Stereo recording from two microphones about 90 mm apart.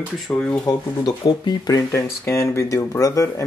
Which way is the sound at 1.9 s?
30° left (ahead or behind).